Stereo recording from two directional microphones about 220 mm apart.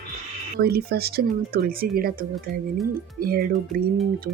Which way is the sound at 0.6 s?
45° right (ahead or behind).